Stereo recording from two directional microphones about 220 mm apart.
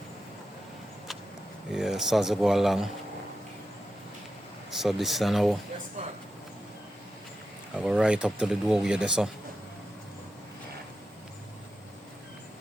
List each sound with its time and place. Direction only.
1.7 s speech: centre (ahead or behind)
4.8 s speech: centre (ahead or behind)
7.8 s speech: 5° right (ahead or behind)